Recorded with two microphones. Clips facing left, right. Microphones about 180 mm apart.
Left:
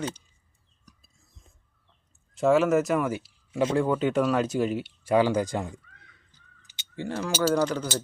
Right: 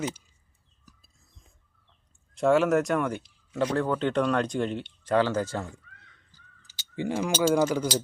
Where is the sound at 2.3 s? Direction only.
Centre (ahead or behind); by 6.9 s 20° left (ahead or behind).